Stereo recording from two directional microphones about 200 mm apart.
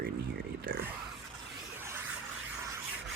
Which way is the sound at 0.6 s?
55° right (ahead or behind).